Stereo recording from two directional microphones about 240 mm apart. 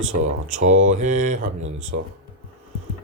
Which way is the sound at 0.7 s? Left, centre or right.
Right.